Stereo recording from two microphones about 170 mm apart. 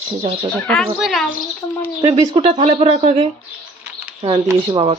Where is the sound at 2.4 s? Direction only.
35° right (ahead or behind).